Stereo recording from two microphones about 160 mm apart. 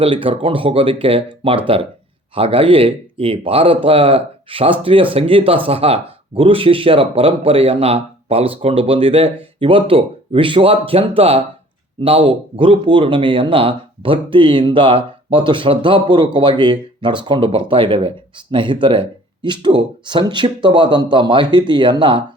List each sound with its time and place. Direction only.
0.0 s speech: 35° right (ahead or behind)